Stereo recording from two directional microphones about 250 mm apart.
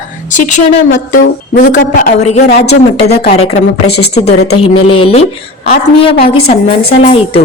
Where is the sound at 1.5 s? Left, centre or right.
Left.